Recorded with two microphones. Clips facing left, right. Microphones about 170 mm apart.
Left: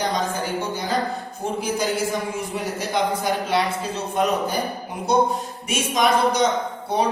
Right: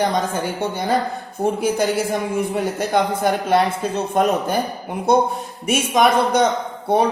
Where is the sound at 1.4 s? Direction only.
60° right (ahead or behind).